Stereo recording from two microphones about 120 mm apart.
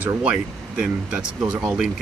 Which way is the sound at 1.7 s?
5° right (ahead or behind).